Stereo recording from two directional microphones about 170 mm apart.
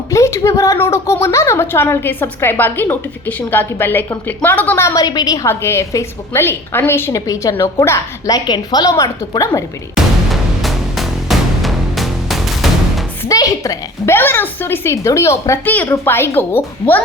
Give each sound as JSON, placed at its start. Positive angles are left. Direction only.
{"t": 0.1, "sound": "a woman's voice", "side_deg": 15}
{"t": 10.6, "sound": "music", "side_deg": 0}
{"t": 13.2, "sound": "a woman's voice", "side_deg": 20}